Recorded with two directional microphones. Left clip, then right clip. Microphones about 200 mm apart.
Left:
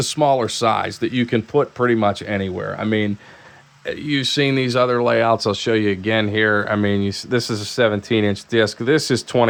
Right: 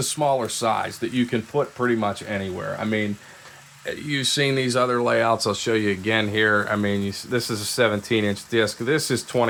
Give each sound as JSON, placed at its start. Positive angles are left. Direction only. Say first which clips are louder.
{"t": 0.0, "sound": "speech", "louder": "left 5 dB", "side_deg": 45}
{"t": 3.8, "sound": "speech", "louder": "left 3 dB", "side_deg": 35}